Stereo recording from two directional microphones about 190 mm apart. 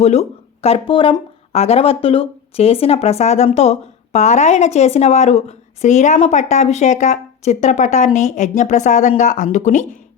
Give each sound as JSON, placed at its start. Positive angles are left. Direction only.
{"t": 0.0, "sound": "speech", "side_deg": 35}